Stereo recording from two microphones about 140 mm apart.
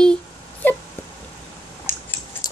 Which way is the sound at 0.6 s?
15° left (ahead or behind).